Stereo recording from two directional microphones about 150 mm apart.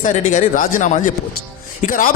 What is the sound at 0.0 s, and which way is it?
A man's voice, 55° left (ahead or behind).